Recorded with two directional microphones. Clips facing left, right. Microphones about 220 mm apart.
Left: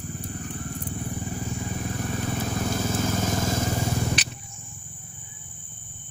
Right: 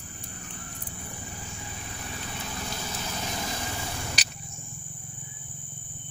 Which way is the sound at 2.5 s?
50° left (ahead or behind).